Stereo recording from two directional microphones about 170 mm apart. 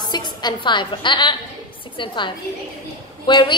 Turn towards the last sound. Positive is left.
turn(degrees=25)  # may be behind; listen again after turning